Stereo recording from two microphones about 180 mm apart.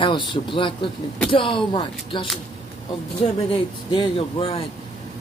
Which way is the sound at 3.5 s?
30° left (ahead or behind).